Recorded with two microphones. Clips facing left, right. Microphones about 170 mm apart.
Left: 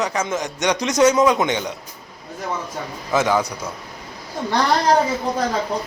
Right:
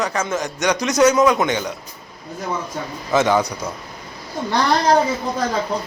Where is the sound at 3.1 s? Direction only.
5° left (ahead or behind).